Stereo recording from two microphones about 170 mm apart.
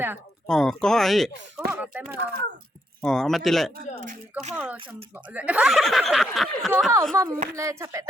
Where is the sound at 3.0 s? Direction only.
5° left (ahead or behind).